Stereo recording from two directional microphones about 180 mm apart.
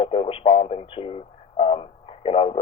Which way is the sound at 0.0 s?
30° left (ahead or behind).